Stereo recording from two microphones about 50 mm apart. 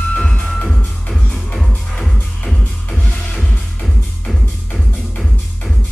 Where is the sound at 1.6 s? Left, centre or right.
Centre.